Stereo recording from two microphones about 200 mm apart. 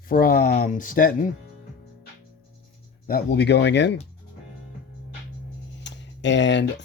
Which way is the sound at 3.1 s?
50° left (ahead or behind).